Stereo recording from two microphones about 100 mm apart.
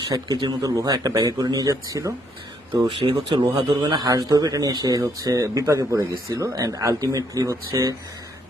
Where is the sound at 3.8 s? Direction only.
40° right (ahead or behind).